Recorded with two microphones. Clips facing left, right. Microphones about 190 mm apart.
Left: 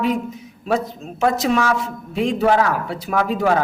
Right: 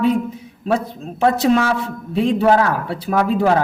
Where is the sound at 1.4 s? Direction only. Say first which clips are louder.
Right 3 dB; 30° right (ahead or behind).